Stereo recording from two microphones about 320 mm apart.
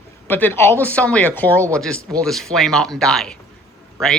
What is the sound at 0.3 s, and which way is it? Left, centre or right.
Speech, centre.